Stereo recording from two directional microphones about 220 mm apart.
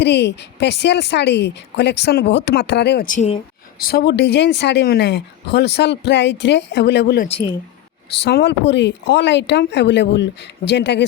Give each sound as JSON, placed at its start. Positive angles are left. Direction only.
{"t": 0.0, "sound": "speech", "side_deg": 50}
{"t": 7.3, "sound": "speech", "side_deg": 25}
{"t": 8.1, "sound": "speech", "side_deg": 50}